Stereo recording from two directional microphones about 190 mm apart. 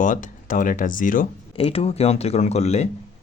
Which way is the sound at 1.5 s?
30° left (ahead or behind).